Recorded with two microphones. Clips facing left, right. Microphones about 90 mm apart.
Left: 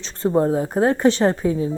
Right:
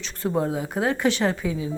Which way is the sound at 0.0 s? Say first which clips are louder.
Left 6 dB; 35° left (ahead or behind).